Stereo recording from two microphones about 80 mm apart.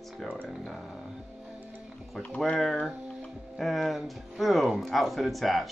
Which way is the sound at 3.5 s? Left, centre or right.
Centre.